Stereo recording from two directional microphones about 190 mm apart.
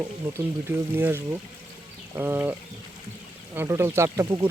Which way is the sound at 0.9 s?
10° right (ahead or behind).